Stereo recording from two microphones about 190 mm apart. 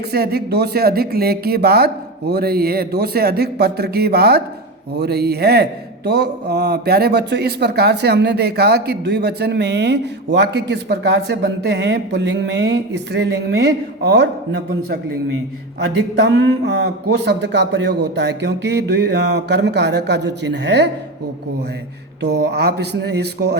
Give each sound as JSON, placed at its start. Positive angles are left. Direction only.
{"t": 0.1, "sound": "speech", "side_deg": -55}
{"t": 22.2, "sound": "speech", "side_deg": -60}